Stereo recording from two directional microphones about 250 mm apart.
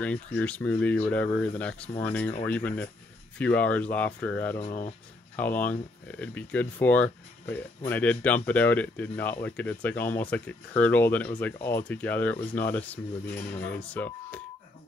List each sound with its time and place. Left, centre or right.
0.0 s speech: centre
4.6 s speech: left
5.3 s speech: centre